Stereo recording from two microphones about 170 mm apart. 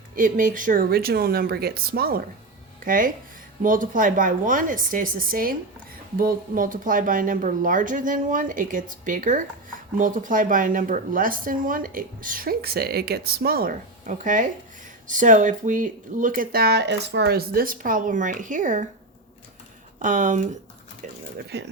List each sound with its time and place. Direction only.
0.2 s speech: 55° right (ahead or behind)
20.0 s speech: 50° right (ahead or behind)
21.5 s speech: 75° right (ahead or behind)